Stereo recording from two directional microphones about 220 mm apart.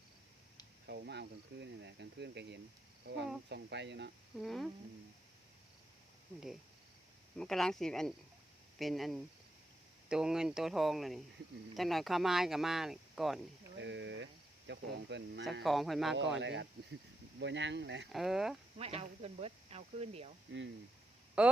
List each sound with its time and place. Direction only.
0.9 s speech: 45° right (ahead or behind)
4.4 s speech: centre (ahead or behind)
7.3 s speech: centre (ahead or behind)
13.7 s speech: 55° right (ahead or behind)
15.6 s speech: centre (ahead or behind)
16.4 s speech: 55° right (ahead or behind)
18.1 s speech: centre (ahead or behind)
18.8 s speech: 25° right (ahead or behind)
21.4 s speech: 5° right (ahead or behind)